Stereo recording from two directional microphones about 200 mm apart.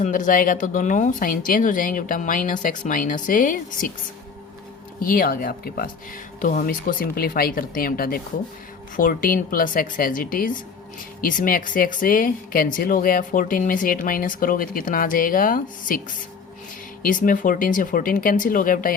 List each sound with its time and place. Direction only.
0.0 s speech: 40° left (ahead or behind)
4.9 s speech: 45° left (ahead or behind)